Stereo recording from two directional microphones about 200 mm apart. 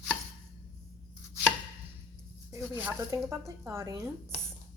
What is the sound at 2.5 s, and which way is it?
Speech, 10° right (ahead or behind).